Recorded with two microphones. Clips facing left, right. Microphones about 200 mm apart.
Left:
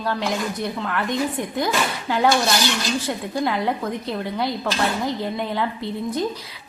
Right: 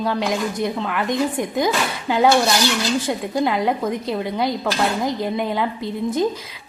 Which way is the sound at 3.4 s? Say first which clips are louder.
Right 3 dB; 15° right (ahead or behind).